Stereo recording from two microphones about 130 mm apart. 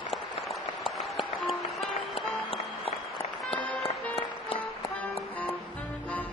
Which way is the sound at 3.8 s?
45° left (ahead or behind).